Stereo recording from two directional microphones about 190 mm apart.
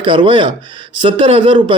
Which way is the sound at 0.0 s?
25° right (ahead or behind).